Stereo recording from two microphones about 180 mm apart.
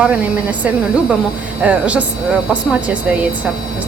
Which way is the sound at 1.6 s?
5° right (ahead or behind).